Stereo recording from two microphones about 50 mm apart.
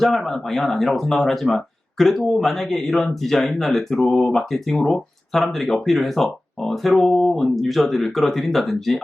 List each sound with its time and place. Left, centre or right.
0.0 s speech: centre